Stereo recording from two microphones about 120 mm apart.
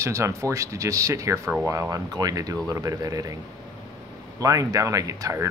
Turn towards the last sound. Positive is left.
turn(degrees=-25)  # may be behind; listen again after turning